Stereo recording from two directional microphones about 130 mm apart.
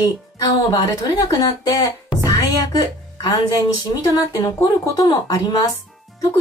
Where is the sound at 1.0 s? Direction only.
30° left (ahead or behind).